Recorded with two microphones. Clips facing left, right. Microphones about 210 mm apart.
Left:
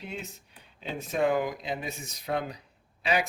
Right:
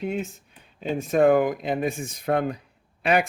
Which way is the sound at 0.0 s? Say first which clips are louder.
Right 11 dB; 50° right (ahead or behind).